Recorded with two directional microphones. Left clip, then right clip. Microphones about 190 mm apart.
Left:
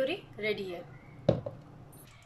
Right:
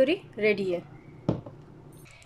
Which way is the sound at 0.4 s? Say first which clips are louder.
Right 9 dB; 40° right (ahead or behind).